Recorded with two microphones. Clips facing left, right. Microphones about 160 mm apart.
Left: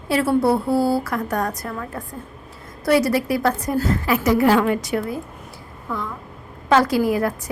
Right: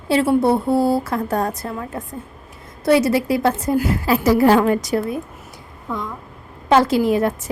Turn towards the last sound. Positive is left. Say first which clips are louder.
# right 2 dB
turn(degrees=-25)  # may be behind; listen again after turning